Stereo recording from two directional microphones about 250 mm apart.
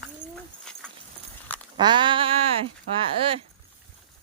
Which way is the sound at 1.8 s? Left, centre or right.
Centre.